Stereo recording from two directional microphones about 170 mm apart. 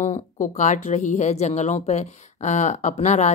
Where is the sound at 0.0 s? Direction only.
45° left (ahead or behind).